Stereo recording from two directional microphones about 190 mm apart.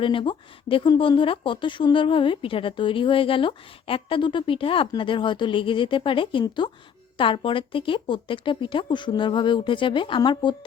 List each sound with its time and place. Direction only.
0.0 s speech: 25° left (ahead or behind)